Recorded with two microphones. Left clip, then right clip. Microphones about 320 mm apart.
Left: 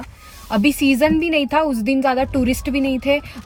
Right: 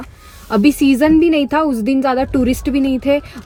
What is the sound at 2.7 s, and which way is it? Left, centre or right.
Speech, right.